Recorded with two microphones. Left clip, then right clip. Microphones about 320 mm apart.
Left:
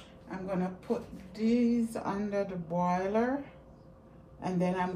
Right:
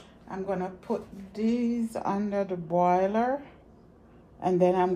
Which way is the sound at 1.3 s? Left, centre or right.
Centre.